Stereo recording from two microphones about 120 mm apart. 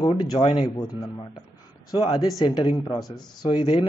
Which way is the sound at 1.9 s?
35° left (ahead or behind).